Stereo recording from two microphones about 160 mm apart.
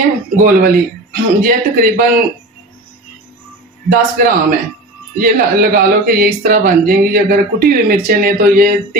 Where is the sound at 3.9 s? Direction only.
60° right (ahead or behind).